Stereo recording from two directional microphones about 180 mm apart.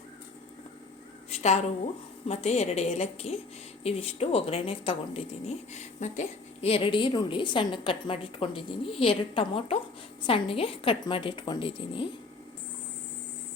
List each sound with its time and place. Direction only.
1.3 s a woman's voice: 35° left (ahead or behind)